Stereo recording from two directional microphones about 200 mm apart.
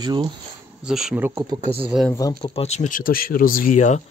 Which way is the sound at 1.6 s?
30° right (ahead or behind).